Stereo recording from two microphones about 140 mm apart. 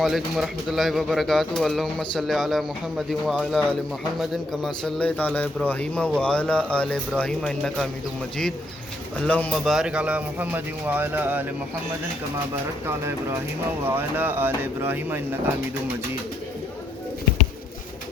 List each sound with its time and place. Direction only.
0.0 s speech: centre (ahead or behind)
9.1 s speech: 10° left (ahead or behind); by 11.4 s 15° right (ahead or behind)
12.9 s speech: 15° right (ahead or behind)